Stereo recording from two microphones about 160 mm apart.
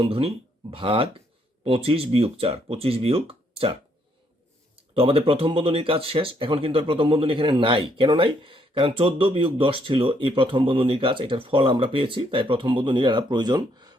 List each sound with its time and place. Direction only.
0.0 s speech: 35° right (ahead or behind)
4.9 s speech: 35° right (ahead or behind)